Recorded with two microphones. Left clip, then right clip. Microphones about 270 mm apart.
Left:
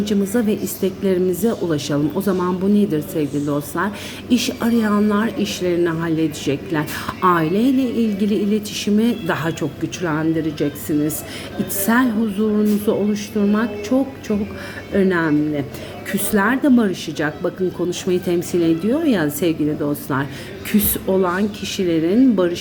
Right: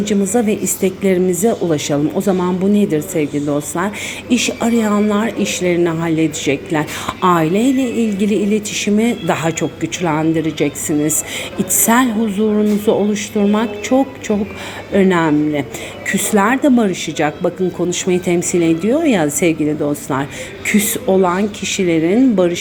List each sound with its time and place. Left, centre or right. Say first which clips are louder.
0.0 s speech: right 4 dB; centre
7.8 s speech: right 3 dB; right
8.4 s speech: right 4 dB; centre
14.9 s speech: right 4 dB; centre